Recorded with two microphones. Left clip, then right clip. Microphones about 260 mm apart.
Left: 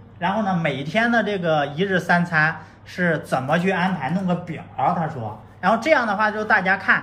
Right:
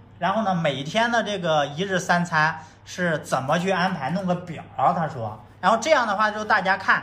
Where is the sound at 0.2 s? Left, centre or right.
Centre.